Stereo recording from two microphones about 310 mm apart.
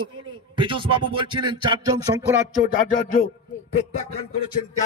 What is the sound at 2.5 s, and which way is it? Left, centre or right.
Speech, left.